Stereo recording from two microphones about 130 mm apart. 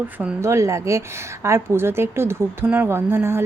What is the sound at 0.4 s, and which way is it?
A woman's voice, 25° right (ahead or behind).